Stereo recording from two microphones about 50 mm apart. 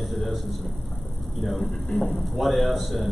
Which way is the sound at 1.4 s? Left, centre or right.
Centre.